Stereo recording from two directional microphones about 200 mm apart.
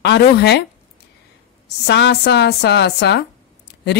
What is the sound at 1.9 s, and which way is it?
A woman's voice, 55° left (ahead or behind).